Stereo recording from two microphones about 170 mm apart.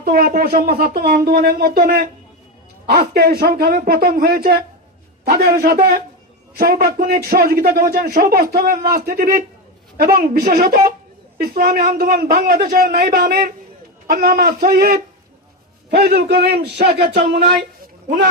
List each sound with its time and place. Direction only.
0.0 s a man's voice: 60° right (ahead or behind)